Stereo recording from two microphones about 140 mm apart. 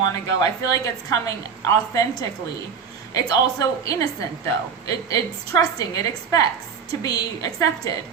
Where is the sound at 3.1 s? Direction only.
25° left (ahead or behind).